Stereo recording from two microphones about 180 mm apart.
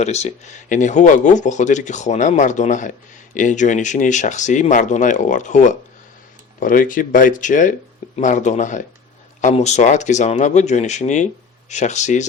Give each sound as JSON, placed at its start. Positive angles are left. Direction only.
{"t": 0.0, "sound": "speech", "side_deg": 40}